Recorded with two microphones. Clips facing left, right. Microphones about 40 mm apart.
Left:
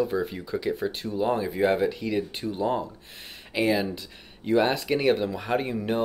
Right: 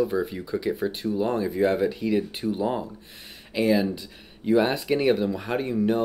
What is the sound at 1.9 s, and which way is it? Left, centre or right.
Speech, centre.